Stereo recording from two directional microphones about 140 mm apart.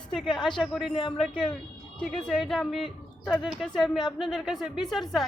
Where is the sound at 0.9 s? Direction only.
35° left (ahead or behind).